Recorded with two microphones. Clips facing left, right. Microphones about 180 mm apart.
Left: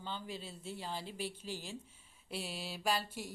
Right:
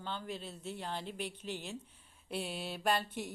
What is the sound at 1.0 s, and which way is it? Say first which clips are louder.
Speech: right 1 dB; 55° right (ahead or behind).